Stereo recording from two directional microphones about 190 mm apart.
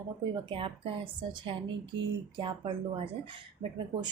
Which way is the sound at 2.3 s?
25° right (ahead or behind).